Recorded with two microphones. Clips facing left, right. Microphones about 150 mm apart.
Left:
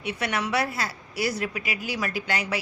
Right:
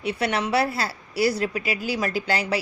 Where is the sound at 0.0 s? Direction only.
30° right (ahead or behind).